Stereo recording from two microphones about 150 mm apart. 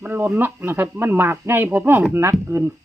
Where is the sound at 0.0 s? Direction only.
15° right (ahead or behind).